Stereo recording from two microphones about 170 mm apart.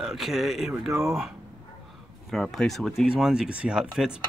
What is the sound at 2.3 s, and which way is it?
Speech, centre (ahead or behind).